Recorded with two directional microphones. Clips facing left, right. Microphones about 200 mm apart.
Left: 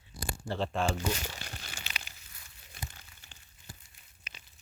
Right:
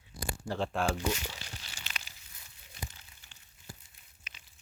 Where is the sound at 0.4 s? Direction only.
5° right (ahead or behind).